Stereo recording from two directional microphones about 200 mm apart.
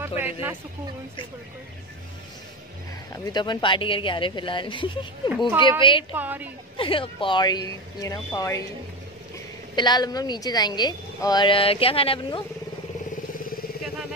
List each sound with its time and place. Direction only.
0.2 s speech: 10° right (ahead or behind)
3.1 s a woman's voice: 20° left (ahead or behind)
6.1 s a woman's voice: 10° right (ahead or behind)
6.8 s a woman's voice: 25° left (ahead or behind)
9.8 s a woman's voice: 20° left (ahead or behind)